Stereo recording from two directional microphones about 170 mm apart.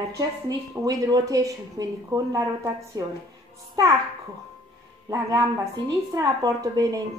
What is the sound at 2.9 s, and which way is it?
Speech, 15° right (ahead or behind).